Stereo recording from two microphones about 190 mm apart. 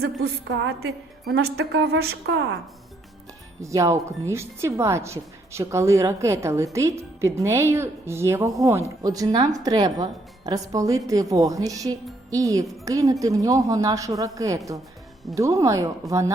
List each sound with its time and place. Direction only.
0.0 s a woman's voice: 65° right (ahead or behind)
3.6 s speech: 15° right (ahead or behind)